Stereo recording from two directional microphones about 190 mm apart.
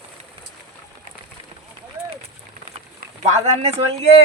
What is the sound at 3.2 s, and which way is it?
Speech, 35° right (ahead or behind).